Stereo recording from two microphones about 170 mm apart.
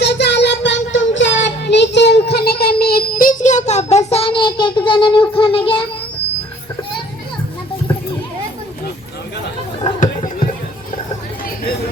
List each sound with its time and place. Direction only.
0.0 s child singing: 90° left; by 5.8 s 30° left (ahead or behind)
9.8 s chatter: 45° left (ahead or behind)